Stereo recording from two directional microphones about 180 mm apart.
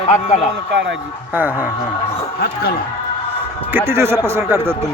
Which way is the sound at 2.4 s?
60° left (ahead or behind).